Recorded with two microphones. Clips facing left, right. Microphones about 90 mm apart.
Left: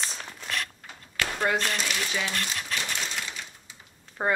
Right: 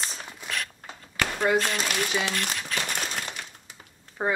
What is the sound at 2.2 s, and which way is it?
Crumpling, 55° right (ahead or behind).